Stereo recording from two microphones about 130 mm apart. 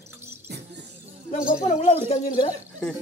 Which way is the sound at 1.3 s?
70° left (ahead or behind).